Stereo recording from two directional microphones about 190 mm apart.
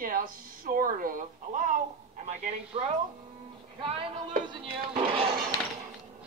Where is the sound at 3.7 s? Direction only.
30° right (ahead or behind).